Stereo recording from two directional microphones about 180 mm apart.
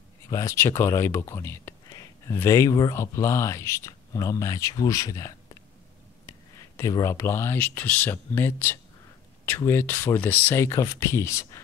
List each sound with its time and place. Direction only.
0.3 s speech: 15° left (ahead or behind)
6.8 s speech: 15° left (ahead or behind)